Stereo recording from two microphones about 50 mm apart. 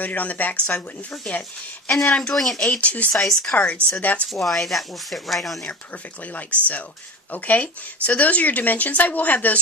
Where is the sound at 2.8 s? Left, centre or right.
Left.